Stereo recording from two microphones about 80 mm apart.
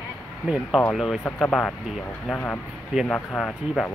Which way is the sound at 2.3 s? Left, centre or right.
Left.